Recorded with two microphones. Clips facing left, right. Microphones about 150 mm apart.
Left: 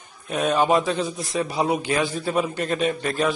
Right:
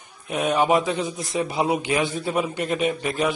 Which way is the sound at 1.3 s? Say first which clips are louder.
Right 1 dB; 20° right (ahead or behind).